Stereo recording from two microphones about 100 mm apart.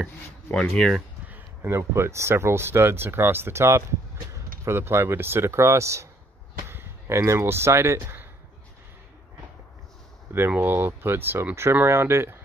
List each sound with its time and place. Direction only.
0.5 s speech: 10° left (ahead or behind)
1.3 s speech: 25° right (ahead or behind)
10.3 s speech: 20° right (ahead or behind)